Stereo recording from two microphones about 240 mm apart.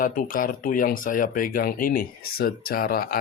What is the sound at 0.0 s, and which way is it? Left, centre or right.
Speech, left.